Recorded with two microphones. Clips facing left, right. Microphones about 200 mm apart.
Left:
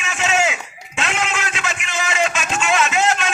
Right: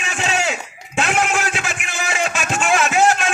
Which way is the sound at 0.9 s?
55° right (ahead or behind).